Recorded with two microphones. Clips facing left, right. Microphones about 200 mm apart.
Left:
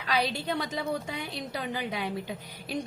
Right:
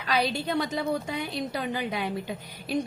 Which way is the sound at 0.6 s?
50° right (ahead or behind).